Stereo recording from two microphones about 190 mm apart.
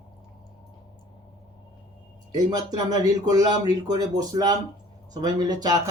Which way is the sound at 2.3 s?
20° right (ahead or behind).